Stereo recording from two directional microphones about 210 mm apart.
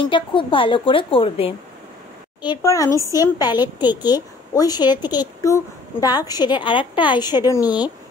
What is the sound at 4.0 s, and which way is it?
Speech, 20° left (ahead or behind).